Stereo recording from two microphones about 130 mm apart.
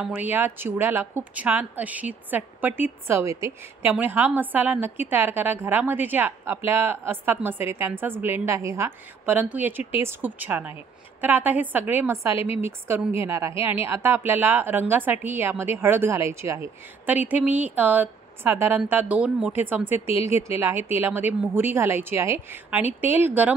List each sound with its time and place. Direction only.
0.0 s a woman's voice: 10° right (ahead or behind)